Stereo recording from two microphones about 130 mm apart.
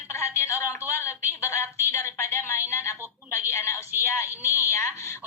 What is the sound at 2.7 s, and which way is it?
A woman's voice, 20° left (ahead or behind).